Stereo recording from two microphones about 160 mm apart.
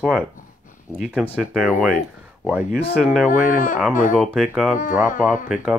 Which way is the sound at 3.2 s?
60° left (ahead or behind).